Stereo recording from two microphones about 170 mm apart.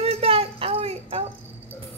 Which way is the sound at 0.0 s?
35° right (ahead or behind).